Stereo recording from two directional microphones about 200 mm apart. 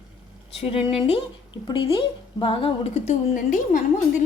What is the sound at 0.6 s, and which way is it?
A woman's voice, 30° left (ahead or behind).